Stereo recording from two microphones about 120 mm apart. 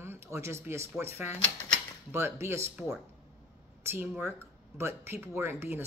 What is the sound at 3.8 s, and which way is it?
Speech, 15° right (ahead or behind).